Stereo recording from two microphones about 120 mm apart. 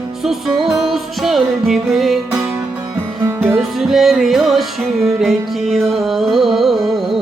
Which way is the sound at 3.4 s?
Centre (ahead or behind).